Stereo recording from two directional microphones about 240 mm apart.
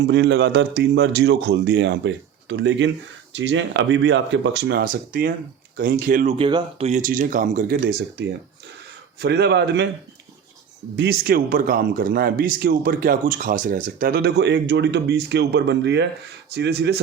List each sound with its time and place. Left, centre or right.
0.1 s a man's voice: right
9.1 s a man's voice: right
10.9 s a man's voice: right